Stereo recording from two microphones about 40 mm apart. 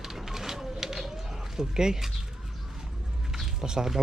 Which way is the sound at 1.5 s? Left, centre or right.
Centre.